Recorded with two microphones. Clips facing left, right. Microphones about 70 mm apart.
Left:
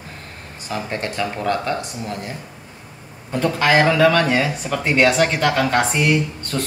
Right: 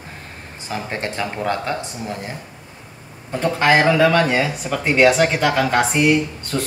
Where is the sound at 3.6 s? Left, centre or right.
Centre.